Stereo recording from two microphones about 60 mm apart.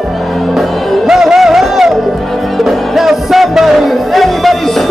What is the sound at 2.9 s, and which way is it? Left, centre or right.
Music, centre.